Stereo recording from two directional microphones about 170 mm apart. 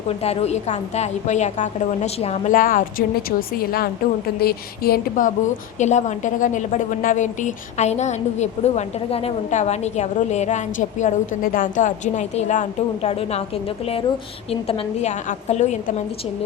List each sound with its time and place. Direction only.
0.1 s a woman's voice: 40° left (ahead or behind)
2.5 s a woman's voice: 55° left (ahead or behind)
5.8 s a woman's voice: 45° left (ahead or behind)
14.7 s a woman's voice: 40° left (ahead or behind)